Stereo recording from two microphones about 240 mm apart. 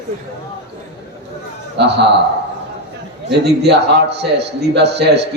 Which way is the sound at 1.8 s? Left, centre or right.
Right.